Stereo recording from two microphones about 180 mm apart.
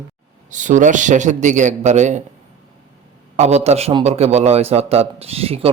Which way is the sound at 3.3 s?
40° right (ahead or behind).